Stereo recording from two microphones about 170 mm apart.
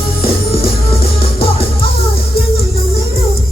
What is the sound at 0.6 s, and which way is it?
Music, 35° left (ahead or behind).